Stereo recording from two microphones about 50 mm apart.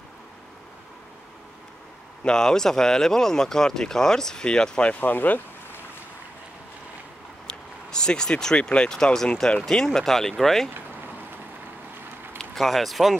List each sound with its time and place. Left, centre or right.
2.2 s speech: centre
5.0 s speech: left
7.4 s speech: centre
12.4 s speech: centre